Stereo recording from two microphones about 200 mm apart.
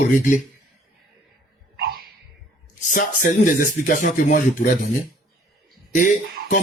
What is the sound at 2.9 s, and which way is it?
Speech, 40° left (ahead or behind).